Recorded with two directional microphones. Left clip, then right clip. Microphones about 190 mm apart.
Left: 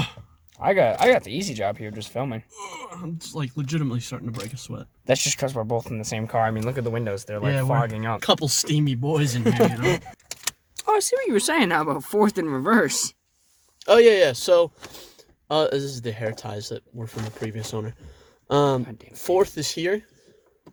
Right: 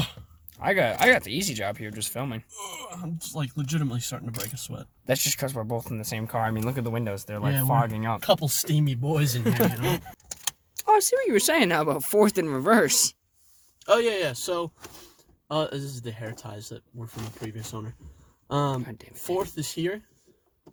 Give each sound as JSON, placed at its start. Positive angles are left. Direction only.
{"t": 0.5, "sound": "speech", "side_deg": 5}
{"t": 2.8, "sound": "speech", "side_deg": 20}
{"t": 8.9, "sound": "speech", "side_deg": 15}
{"t": 11.3, "sound": "speech", "side_deg": -10}
{"t": 13.8, "sound": "speech", "side_deg": 45}
{"t": 18.4, "sound": "speech", "side_deg": 45}
{"t": 18.9, "sound": "speech", "side_deg": -10}
{"t": 19.2, "sound": "speech", "side_deg": 55}